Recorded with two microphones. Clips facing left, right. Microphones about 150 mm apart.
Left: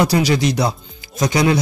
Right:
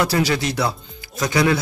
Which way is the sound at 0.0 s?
15° left (ahead or behind).